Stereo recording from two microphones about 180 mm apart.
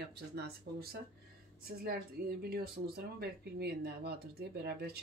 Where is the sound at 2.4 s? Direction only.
60° right (ahead or behind).